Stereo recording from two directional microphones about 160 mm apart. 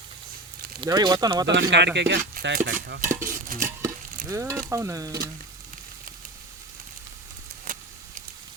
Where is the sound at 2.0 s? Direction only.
90° right.